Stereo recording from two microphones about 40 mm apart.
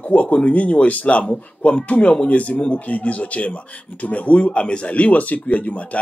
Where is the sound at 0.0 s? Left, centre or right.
Left.